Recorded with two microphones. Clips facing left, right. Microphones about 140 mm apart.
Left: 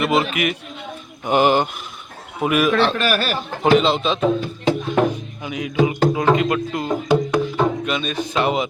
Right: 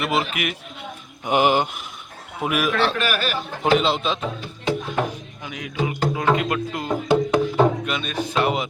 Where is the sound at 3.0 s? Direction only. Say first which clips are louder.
Left 4 dB; 35° left (ahead or behind).